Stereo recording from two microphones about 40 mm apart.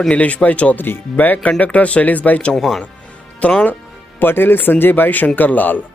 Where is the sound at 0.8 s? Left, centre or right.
Left.